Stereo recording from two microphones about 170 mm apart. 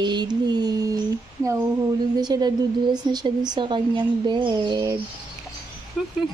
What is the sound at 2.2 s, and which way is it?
A woman's voice, 25° right (ahead or behind).